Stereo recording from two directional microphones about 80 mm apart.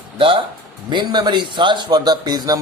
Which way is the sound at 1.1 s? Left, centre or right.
Right.